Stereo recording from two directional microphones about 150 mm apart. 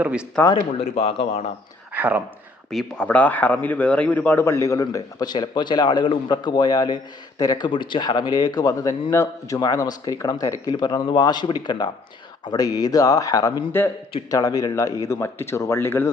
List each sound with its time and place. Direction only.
0.0 s speech: 5° right (ahead or behind)
0.8 s speech: 45° left (ahead or behind)
1.9 s a sound: 10° right (ahead or behind)
2.6 s a man's voice: 5° left (ahead or behind)